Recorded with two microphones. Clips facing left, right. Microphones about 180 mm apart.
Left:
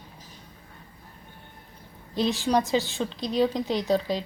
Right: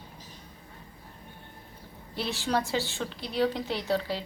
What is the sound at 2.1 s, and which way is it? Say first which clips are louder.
A woman's voice: left 6 dB; 15° left (ahead or behind).